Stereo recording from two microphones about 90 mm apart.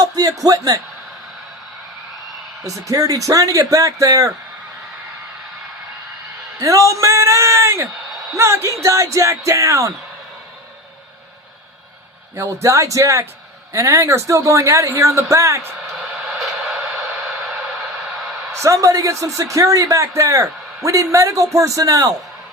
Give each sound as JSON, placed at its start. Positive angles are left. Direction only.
{"t": 0.0, "sound": "speech", "side_deg": -40}
{"t": 2.6, "sound": "a man's voice", "side_deg": -40}
{"t": 6.6, "sound": "a man's voice", "side_deg": -35}
{"t": 12.4, "sound": "a man's voice", "side_deg": -35}
{"t": 18.5, "sound": "a man's voice", "side_deg": -35}